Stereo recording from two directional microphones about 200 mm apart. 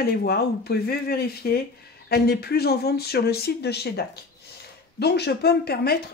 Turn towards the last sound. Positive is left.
turn(degrees=50)  # may be behind; listen again after turning